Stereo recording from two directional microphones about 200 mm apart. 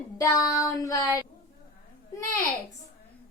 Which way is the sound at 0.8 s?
15° left (ahead or behind).